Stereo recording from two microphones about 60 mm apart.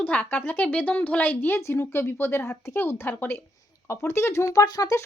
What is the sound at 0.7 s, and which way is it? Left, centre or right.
Speech, left.